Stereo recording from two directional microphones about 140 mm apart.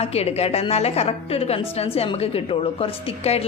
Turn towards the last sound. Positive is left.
turn(degrees=45)  # may be behind; listen again after turning